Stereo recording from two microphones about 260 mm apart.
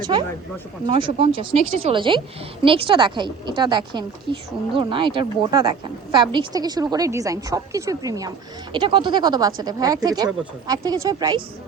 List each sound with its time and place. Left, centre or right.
0.0 s a woman's voice: centre